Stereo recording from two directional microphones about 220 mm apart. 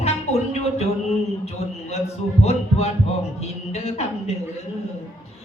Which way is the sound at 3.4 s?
30° left (ahead or behind).